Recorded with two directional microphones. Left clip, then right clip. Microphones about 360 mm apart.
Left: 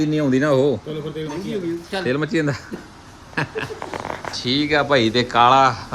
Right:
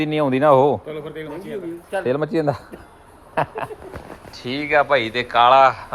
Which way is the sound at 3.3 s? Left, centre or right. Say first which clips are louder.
Right 2 dB; centre.